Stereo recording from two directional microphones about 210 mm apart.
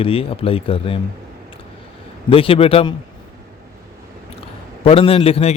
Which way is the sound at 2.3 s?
25° left (ahead or behind).